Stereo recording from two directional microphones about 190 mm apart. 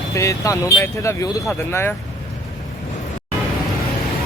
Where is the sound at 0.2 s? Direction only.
15° left (ahead or behind).